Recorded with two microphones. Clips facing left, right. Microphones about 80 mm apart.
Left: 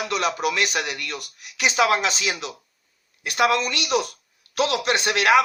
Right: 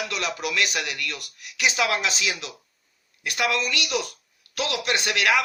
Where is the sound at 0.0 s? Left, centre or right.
Left.